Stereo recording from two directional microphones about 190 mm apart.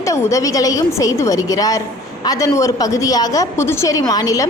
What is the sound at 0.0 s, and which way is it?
A woman's voice, 15° left (ahead or behind).